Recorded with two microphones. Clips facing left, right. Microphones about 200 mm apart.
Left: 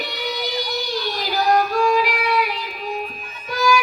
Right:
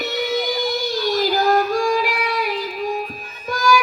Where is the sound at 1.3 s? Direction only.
45° right (ahead or behind).